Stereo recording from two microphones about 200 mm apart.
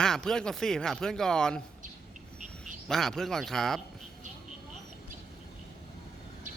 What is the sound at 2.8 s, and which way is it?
Speech, centre (ahead or behind).